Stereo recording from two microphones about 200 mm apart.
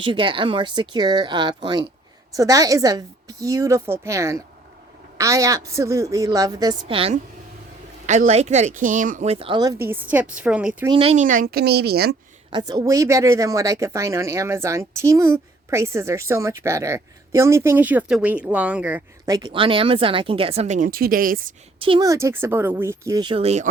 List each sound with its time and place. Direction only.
0.0 s a woman's voice: 25° right (ahead or behind)
9.8 s a woman's voice: 10° right (ahead or behind)
10.8 s speech: 25° right (ahead or behind); by 12.1 s 50° right (ahead or behind)
12.5 s a woman's voice: 20° right (ahead or behind); by 21.4 s 45° right (ahead or behind)
21.8 s a woman's voice: 25° right (ahead or behind)